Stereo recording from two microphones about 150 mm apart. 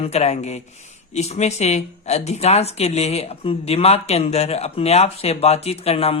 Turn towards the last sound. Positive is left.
turn(degrees=40)  # may be behind; listen again after turning